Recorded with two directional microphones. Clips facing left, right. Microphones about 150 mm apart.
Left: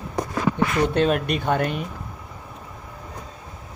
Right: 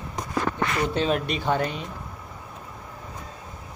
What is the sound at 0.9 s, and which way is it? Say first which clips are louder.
Speech: left 4 dB; 55° left (ahead or behind).